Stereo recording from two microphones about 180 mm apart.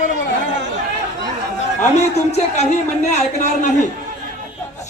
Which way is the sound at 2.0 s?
40° left (ahead or behind).